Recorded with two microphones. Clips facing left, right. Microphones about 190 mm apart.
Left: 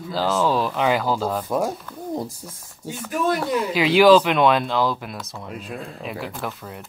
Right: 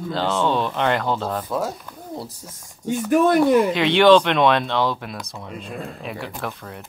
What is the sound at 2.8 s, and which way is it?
Speech, 5° left (ahead or behind).